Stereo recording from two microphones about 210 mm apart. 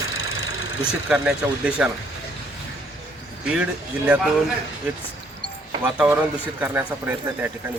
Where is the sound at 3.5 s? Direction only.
5° right (ahead or behind).